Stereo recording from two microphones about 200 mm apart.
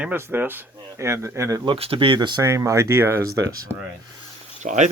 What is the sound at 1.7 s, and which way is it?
Speech, 30° right (ahead or behind).